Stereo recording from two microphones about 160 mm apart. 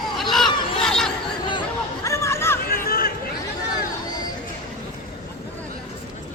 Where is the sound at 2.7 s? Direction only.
70° left (ahead or behind).